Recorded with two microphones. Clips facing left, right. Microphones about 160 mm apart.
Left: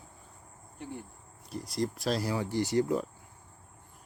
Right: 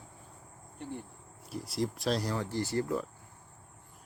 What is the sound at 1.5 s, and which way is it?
Speech, 5° right (ahead or behind).